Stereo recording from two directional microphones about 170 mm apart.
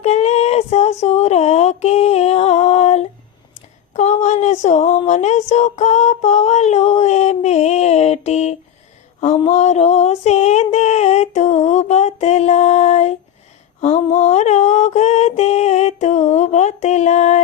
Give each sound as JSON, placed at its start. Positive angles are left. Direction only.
{"t": 0.0, "sound": "child singing", "side_deg": 40}
{"t": 3.9, "sound": "a sound", "side_deg": 45}
{"t": 13.8, "sound": "mantra", "side_deg": 40}